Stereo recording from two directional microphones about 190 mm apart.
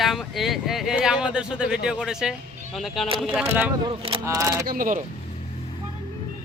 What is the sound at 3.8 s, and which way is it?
Speech, 25° right (ahead or behind).